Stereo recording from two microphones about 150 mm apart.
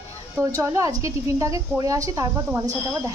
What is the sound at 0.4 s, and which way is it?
Speech, 20° right (ahead or behind).